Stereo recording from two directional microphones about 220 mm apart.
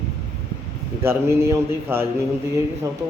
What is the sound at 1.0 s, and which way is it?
Speech, 10° right (ahead or behind).